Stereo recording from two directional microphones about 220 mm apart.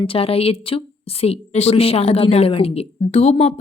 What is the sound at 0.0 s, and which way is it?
A woman's voice, 25° left (ahead or behind).